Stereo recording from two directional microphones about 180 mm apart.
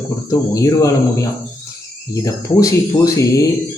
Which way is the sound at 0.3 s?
20° left (ahead or behind).